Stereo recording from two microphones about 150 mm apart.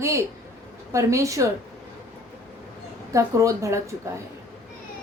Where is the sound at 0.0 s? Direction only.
20° right (ahead or behind).